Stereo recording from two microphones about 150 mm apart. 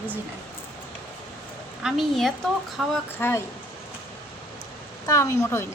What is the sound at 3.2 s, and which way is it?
Speech, 15° left (ahead or behind).